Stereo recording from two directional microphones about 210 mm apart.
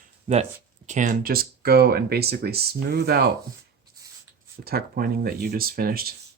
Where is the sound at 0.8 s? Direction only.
35° right (ahead or behind).